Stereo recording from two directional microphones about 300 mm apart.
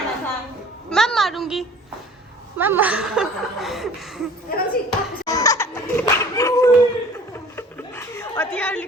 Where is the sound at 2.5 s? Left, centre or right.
Centre.